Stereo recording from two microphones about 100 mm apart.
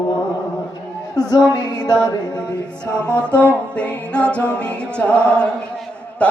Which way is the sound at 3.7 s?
10° left (ahead or behind).